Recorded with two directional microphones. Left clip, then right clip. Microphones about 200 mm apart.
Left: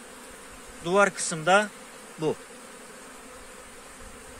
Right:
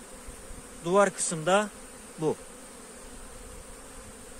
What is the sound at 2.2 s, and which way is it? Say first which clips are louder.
Bee: left 1 dB; 20° right (ahead or behind).